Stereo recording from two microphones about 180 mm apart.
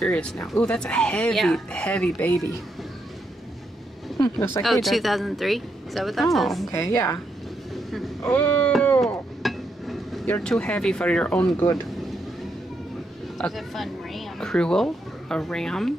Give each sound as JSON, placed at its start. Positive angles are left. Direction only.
{"t": 0.0, "sound": "speech", "side_deg": 5}
{"t": 4.6, "sound": "speech", "side_deg": 0}
{"t": 6.7, "sound": "a woman's voice", "side_deg": 15}
{"t": 8.2, "sound": "a sound", "side_deg": 10}
{"t": 10.3, "sound": "speech", "side_deg": 5}
{"t": 13.4, "sound": "speech", "side_deg": 0}